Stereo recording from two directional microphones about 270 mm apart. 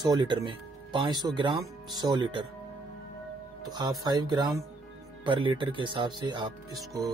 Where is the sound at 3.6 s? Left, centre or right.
Centre.